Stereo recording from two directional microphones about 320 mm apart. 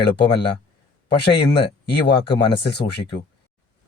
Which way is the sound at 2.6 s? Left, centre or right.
Left.